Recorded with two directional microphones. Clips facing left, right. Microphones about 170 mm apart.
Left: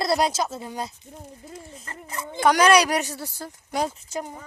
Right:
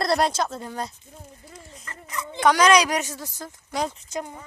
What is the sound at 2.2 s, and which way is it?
Speech, 40° left (ahead or behind).